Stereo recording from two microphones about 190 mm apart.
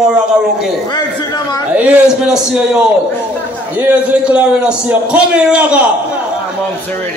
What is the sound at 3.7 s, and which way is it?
A man's voice, 10° right (ahead or behind).